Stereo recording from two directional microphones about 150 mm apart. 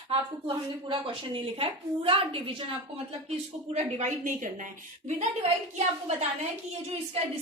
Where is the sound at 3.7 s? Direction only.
55° right (ahead or behind).